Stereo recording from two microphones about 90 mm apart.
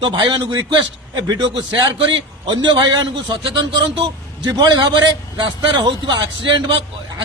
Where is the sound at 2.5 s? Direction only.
50° right (ahead or behind).